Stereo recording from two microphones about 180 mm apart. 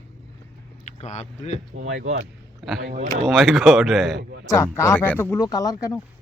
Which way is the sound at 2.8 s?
55° right (ahead or behind).